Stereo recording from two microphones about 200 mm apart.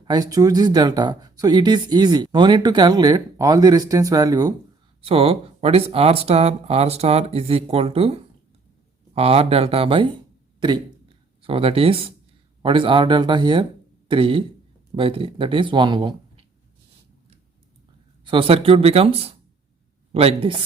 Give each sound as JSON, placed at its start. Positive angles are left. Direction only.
{"t": 0.0, "sound": "speech", "side_deg": -20}
{"t": 5.0, "sound": "speech", "side_deg": -30}
{"t": 11.4, "sound": "speech", "side_deg": -30}
{"t": 18.3, "sound": "speech", "side_deg": -25}